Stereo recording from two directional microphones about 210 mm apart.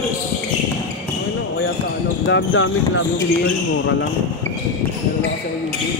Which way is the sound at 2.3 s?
65° left (ahead or behind).